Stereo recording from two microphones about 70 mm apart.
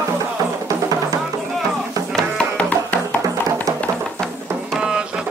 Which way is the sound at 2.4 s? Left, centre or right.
Centre.